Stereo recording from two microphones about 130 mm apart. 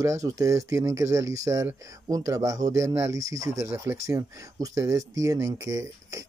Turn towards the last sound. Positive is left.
turn(degrees=-25)  # may be behind; listen again after turning